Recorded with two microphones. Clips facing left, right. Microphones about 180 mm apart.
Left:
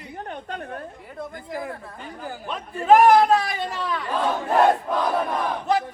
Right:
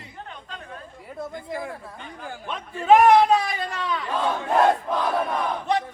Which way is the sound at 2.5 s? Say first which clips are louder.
Even; centre (ahead or behind).